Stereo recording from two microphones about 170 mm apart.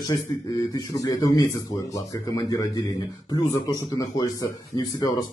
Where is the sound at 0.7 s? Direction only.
20° left (ahead or behind).